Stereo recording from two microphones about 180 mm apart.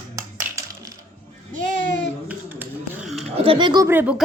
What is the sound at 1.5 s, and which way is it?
Babbling, 45° right (ahead or behind).